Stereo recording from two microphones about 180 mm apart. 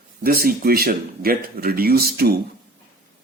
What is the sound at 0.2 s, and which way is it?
Speech, 55° right (ahead or behind).